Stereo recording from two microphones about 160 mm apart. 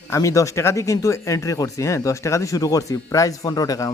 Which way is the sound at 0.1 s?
20° left (ahead or behind).